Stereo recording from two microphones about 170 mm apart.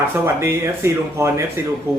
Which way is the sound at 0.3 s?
15° right (ahead or behind).